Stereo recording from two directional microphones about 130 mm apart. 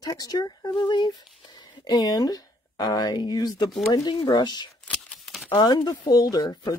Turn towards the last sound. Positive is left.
turn(degrees=30)  # may be behind; listen again after turning